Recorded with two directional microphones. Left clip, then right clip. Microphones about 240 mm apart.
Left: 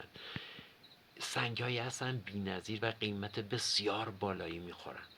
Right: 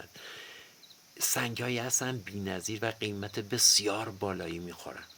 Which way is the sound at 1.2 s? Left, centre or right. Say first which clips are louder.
Right 5 dB; right.